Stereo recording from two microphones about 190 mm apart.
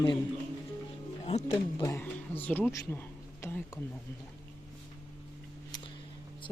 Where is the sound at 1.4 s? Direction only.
15° left (ahead or behind).